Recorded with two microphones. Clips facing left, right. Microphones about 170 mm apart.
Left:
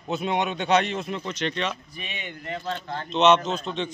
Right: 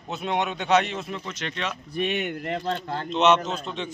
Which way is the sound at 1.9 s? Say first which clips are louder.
Right 11 dB; 65° right (ahead or behind).